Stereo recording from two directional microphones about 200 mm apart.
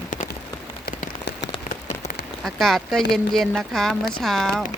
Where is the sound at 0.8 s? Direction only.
55° left (ahead or behind).